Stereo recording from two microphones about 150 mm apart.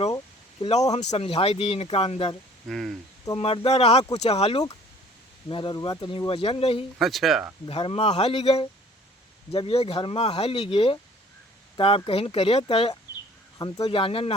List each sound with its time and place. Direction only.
0.9 s speech: 45° left (ahead or behind)
2.6 s speech: centre (ahead or behind)
3.3 s speech: 40° left (ahead or behind)
5.5 s speech: 35° left (ahead or behind)
7.0 s speech: centre (ahead or behind)
7.7 s speech: 40° left (ahead or behind)
13.6 s speech: 25° left (ahead or behind)
13.8 s speech: 35° left (ahead or behind)